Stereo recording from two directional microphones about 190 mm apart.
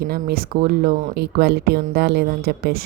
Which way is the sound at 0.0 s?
50° right (ahead or behind).